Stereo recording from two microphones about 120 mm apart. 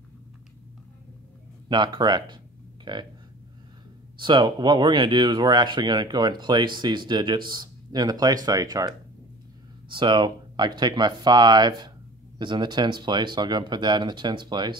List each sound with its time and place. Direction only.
1.7 s speech: 40° right (ahead or behind)
2.8 s a sound: 40° right (ahead or behind)
4.2 s speech: 40° right (ahead or behind)